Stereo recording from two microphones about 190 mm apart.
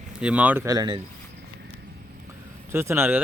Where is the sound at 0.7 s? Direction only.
20° right (ahead or behind).